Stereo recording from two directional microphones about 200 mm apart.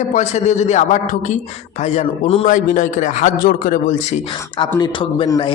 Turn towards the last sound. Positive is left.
turn(degrees=25)  # may be behind; listen again after turning